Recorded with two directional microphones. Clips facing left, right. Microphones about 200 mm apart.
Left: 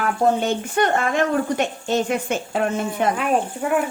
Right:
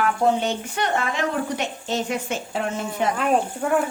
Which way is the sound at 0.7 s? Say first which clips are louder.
Left 7 dB; 50° left (ahead or behind).